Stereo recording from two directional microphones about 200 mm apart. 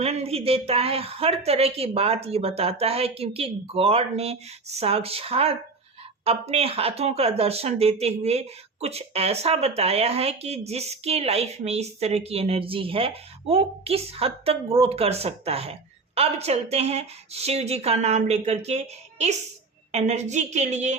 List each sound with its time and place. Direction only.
0.0 s a woman's voice: 30° right (ahead or behind)